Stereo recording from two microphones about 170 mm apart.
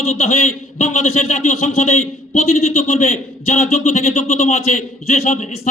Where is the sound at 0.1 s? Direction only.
45° left (ahead or behind).